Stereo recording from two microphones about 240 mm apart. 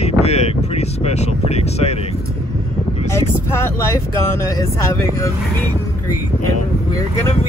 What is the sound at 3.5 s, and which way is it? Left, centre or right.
Speech, centre.